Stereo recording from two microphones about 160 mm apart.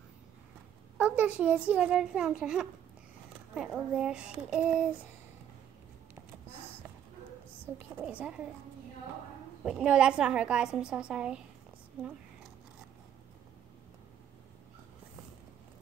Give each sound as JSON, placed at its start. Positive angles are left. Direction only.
{"t": 0.9, "sound": "a child's voice", "side_deg": -10}
{"t": 7.9, "sound": "a child's voice", "side_deg": -10}
{"t": 9.6, "sound": "a woman's voice", "side_deg": -5}